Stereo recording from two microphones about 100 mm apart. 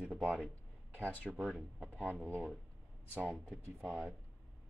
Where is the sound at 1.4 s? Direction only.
Centre (ahead or behind).